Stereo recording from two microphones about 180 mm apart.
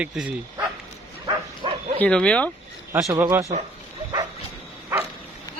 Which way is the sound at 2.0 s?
5° left (ahead or behind).